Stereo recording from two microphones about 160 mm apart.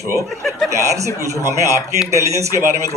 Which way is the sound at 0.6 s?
20° right (ahead or behind).